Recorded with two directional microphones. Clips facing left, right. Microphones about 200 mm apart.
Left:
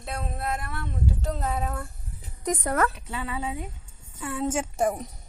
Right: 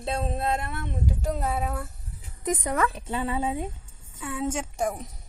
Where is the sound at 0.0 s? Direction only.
25° right (ahead or behind); by 1.9 s 10° right (ahead or behind).